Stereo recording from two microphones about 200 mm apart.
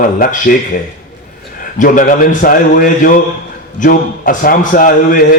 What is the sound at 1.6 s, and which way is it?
A man's voice, 40° left (ahead or behind).